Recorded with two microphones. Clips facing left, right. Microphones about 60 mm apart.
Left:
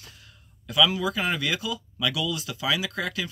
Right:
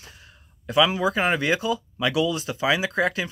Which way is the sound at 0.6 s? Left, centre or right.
Right.